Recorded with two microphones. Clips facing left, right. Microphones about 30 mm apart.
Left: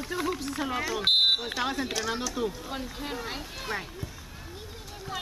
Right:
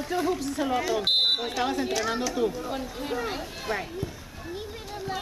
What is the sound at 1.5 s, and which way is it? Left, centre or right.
Speech, centre.